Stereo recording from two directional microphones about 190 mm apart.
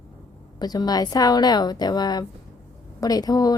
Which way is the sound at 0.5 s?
20° left (ahead or behind).